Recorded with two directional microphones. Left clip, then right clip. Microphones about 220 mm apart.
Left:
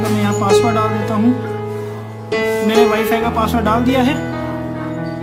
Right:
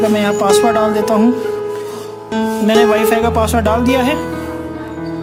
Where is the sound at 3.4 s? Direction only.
45° right (ahead or behind).